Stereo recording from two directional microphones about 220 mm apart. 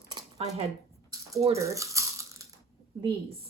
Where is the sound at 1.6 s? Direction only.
15° right (ahead or behind).